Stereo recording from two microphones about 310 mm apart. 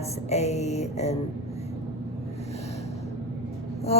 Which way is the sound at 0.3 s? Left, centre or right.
Left.